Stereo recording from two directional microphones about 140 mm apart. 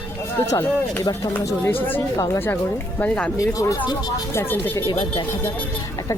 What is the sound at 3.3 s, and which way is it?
Speech, 25° left (ahead or behind).